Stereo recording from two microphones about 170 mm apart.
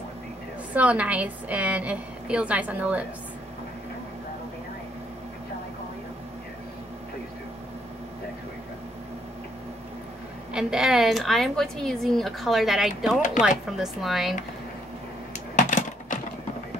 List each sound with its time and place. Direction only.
0.7 s a woman's voice: 10° right (ahead or behind)
10.5 s a woman's voice: 5° right (ahead or behind)
15.5 s computer keyboard: 45° left (ahead or behind)